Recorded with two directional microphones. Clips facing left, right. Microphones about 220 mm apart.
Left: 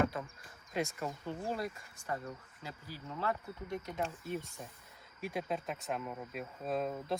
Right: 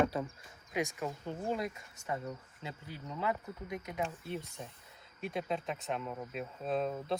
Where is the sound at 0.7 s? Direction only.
15° right (ahead or behind).